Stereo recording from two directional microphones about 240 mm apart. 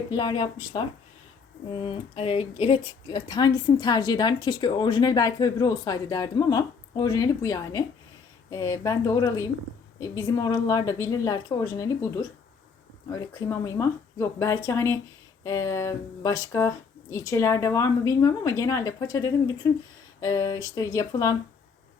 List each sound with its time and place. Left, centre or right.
0.1 s speech: centre